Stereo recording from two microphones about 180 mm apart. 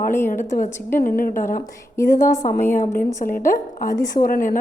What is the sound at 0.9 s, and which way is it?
A woman's voice, 50° left (ahead or behind).